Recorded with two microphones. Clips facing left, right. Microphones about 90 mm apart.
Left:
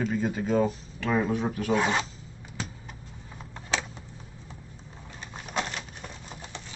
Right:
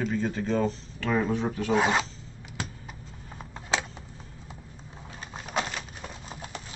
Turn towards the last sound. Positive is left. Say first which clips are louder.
# right 2 dB
turn(degrees=-5)  # may be behind; listen again after turning